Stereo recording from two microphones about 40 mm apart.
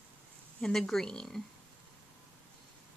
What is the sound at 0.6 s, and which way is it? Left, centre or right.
Speech, centre.